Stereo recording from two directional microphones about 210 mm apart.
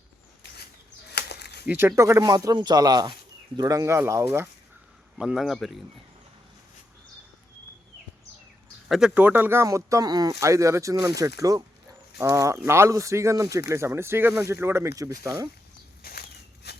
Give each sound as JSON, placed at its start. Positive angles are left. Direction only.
{"t": 1.1, "sound": "a sound", "side_deg": 50}
{"t": 1.6, "sound": "speech", "side_deg": -10}
{"t": 5.1, "sound": "speech", "side_deg": -5}
{"t": 8.9, "sound": "speech", "side_deg": -5}
{"t": 16.0, "sound": "walk", "side_deg": 45}
{"t": 16.7, "sound": "a sound", "side_deg": 50}